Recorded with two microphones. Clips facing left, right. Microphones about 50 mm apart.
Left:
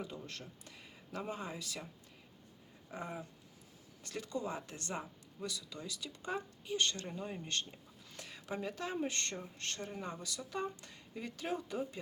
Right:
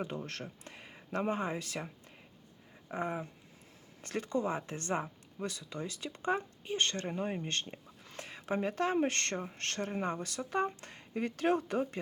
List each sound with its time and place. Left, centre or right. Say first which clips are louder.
0.0 s speech: right 6 dB; right
2.9 s speech: right 7 dB; right